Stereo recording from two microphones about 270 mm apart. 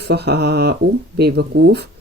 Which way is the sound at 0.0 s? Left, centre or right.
Right.